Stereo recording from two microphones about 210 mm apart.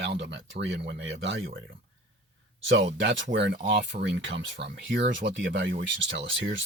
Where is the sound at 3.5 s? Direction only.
40° right (ahead or behind).